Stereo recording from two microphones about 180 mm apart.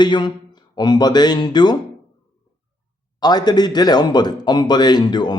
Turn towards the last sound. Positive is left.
turn(degrees=25)  # may be behind; listen again after turning